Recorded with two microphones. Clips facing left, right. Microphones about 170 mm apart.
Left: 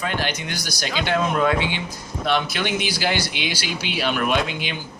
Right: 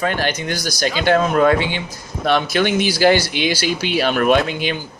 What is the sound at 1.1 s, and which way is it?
Speech, 45° right (ahead or behind).